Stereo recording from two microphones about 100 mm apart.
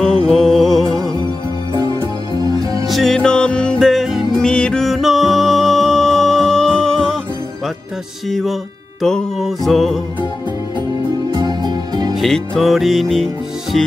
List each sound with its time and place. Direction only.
0.0 s music: 5° left (ahead or behind)
1.2 s music: 45° left (ahead or behind)
2.9 s music: 5° left (ahead or behind)
4.5 s music: 10° left (ahead or behind)
8.3 s music: 5° left (ahead or behind)
11.3 s music: 45° right (ahead or behind)
12.2 s music: centre (ahead or behind)